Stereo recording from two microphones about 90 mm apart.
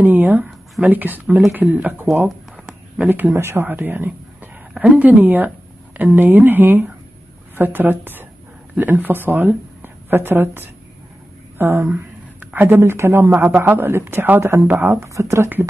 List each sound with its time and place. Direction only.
0.0 s a man's voice: 20° right (ahead or behind)
11.9 s a man's voice: 15° right (ahead or behind)